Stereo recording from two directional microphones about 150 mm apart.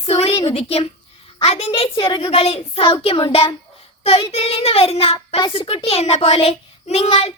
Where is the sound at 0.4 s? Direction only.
40° left (ahead or behind).